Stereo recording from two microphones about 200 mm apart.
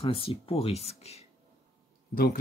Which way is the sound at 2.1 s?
45° left (ahead or behind).